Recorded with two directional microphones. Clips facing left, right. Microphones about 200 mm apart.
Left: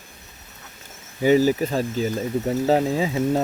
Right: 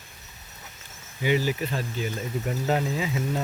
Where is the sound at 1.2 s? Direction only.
40° left (ahead or behind).